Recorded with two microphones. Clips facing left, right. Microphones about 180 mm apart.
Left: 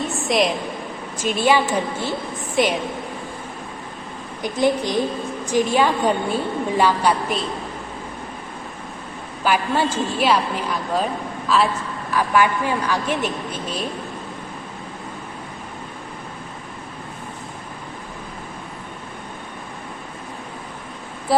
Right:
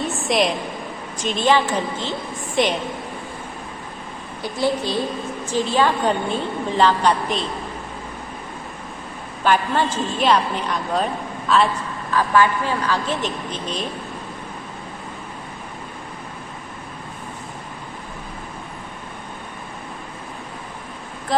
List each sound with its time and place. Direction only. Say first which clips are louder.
0.0 s a sound: even; centre (ahead or behind)
1.2 s a woman's voice: even; 10° left (ahead or behind)
4.4 s a woman's voice: left 2 dB; 20° left (ahead or behind)
9.4 s a woman's voice: right 1 dB; 10° left (ahead or behind)
12.1 s a woman's voice: right 1 dB; 15° left (ahead or behind)